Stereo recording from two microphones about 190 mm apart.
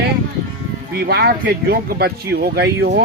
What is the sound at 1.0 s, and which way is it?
Speech, 55° right (ahead or behind).